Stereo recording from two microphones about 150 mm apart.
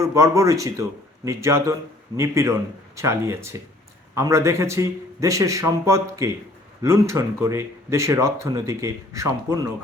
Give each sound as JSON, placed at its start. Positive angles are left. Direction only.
{"t": 0.0, "sound": "speech", "side_deg": -20}